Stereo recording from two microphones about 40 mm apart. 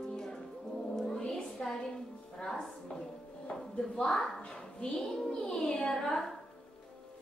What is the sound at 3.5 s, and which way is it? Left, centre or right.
Dishes, centre.